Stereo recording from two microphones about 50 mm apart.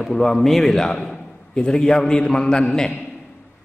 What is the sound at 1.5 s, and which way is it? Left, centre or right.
Mantra, centre.